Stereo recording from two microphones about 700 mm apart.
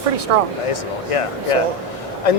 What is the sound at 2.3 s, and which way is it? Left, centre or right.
Speech, left.